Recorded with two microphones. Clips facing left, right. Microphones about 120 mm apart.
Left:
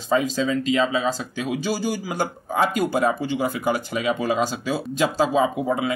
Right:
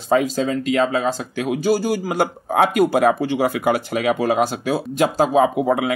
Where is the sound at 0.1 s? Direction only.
55° right (ahead or behind).